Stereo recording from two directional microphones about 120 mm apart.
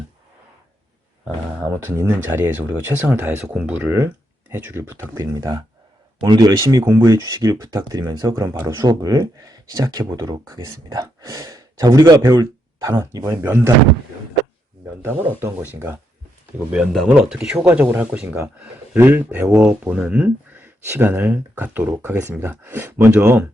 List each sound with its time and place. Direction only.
1.6 s speech: 20° right (ahead or behind)
15.0 s speech: 15° right (ahead or behind)
16.7 s speech: centre (ahead or behind)